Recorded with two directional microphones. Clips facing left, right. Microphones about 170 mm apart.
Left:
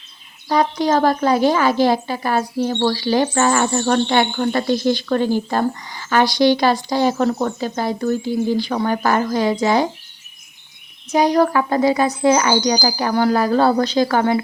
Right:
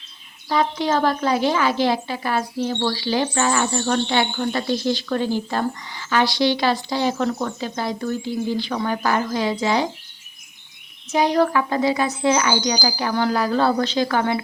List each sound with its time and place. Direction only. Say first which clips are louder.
0.4 s speech: left 3 dB; 40° left (ahead or behind)
11.1 s speech: left 3 dB; 40° left (ahead or behind)